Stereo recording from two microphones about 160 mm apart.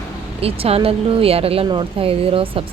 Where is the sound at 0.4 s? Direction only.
35° right (ahead or behind).